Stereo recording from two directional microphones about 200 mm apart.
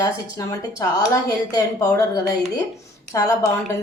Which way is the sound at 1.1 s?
15° left (ahead or behind).